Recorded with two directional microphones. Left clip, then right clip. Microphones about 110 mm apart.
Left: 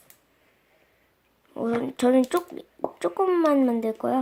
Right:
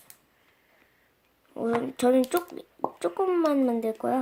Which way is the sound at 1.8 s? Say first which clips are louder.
Left 2 dB; 20° left (ahead or behind).